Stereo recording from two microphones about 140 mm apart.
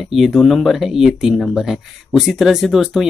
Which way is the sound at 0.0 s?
Centre (ahead or behind).